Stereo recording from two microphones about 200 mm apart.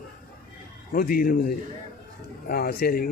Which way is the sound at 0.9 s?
45° left (ahead or behind).